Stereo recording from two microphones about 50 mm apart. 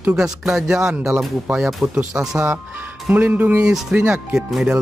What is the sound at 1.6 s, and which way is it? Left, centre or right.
Speech, centre.